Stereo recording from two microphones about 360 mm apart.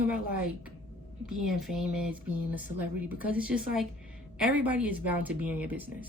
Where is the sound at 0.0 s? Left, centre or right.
Centre.